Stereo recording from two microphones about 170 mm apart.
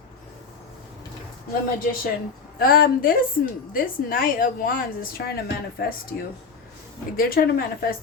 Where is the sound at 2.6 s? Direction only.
60° left (ahead or behind).